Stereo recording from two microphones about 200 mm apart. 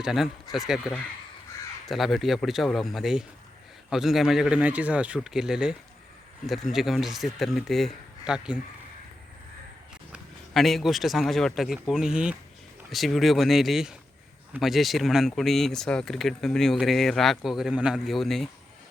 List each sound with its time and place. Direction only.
0.0 s speech: centre (ahead or behind)
10.1 s speech: centre (ahead or behind)